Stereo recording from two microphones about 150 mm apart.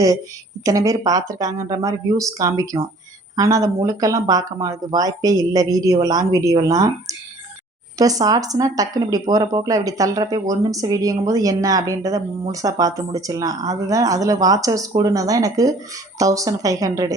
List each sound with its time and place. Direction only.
0.6 s speech: 20° right (ahead or behind)